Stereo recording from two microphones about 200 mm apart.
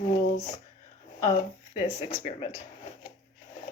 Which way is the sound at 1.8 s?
30° left (ahead or behind).